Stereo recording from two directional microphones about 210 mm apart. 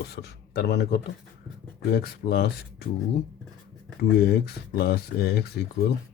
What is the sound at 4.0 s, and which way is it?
Speech, 50° left (ahead or behind).